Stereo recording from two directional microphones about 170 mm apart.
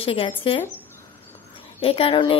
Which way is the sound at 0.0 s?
35° left (ahead or behind).